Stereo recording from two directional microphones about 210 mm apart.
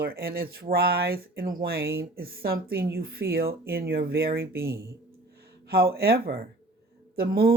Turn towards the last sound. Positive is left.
turn(degrees=-45)  # may be behind; listen again after turning